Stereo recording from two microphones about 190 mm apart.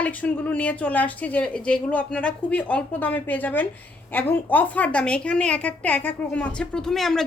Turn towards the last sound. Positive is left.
turn(degrees=0)  # may be behind; listen again after turning